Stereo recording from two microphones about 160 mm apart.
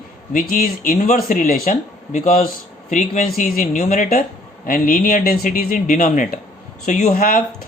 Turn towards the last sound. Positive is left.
turn(degrees=60)  # may be behind; listen again after turning